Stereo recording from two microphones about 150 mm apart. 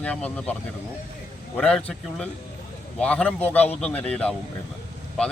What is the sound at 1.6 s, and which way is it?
Speech, 5° left (ahead or behind).